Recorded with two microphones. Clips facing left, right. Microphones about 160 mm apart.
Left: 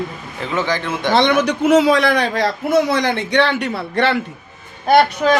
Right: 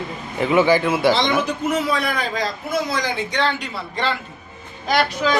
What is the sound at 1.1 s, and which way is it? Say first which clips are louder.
A man's voice: left 5 dB; 75° left (ahead or behind).